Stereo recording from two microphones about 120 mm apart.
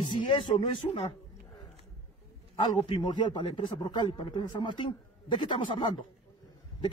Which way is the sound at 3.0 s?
40° left (ahead or behind).